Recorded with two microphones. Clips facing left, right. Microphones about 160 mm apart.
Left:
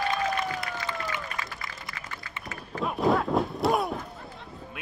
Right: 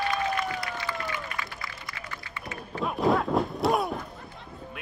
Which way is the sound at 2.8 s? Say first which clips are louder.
Even; centre (ahead or behind).